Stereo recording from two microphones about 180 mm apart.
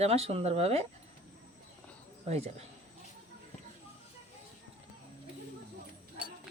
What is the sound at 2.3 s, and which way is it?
Speech, 35° right (ahead or behind).